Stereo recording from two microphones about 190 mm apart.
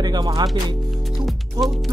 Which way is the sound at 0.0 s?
20° right (ahead or behind).